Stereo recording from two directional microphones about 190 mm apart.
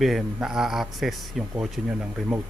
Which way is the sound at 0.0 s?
Centre (ahead or behind).